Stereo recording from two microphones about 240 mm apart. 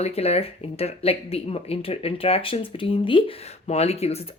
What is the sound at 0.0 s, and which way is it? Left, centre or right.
Speech, left.